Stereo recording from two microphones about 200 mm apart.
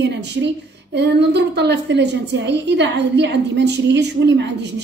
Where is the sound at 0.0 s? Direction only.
60° right (ahead or behind).